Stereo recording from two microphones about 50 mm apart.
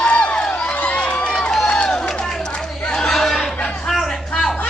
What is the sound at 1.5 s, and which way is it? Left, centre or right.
Run, centre.